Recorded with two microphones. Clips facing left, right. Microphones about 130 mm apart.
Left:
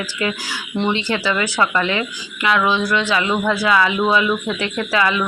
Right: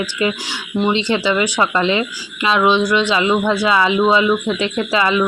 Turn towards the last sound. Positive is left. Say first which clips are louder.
# right 2 dB
turn(degrees=-20)  # may be behind; listen again after turning